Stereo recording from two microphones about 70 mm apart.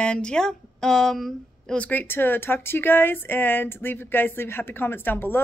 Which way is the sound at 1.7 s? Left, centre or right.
Left.